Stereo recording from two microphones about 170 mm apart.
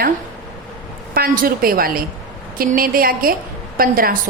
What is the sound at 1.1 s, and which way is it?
A woman's voice, 60° right (ahead or behind).